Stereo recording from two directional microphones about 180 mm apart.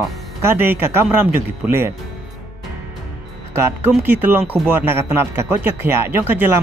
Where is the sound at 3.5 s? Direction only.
15° right (ahead or behind).